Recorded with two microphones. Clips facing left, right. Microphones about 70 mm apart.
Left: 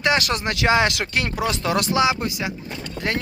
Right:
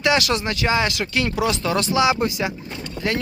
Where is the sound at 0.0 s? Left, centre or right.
Left.